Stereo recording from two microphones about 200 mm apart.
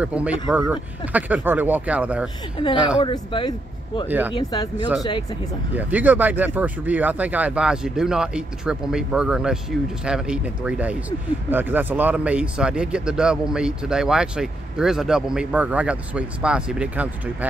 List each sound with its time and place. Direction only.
0.0 s speech: 5° right (ahead or behind)
2.6 s speech: 25° left (ahead or behind)
5.8 s speech: 10° right (ahead or behind)